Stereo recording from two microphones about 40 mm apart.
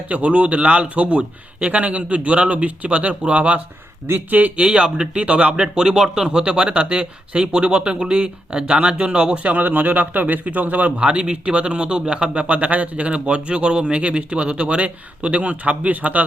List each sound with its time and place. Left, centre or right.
0.1 s speech: right
4.3 s speech: right
4.5 s speech: right
11.0 s speech: right